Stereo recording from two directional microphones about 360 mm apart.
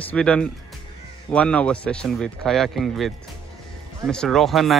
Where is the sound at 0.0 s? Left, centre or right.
Centre.